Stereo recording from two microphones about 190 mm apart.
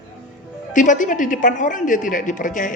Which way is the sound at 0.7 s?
40° left (ahead or behind).